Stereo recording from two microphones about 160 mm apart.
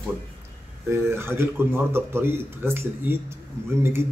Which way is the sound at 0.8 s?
15° right (ahead or behind).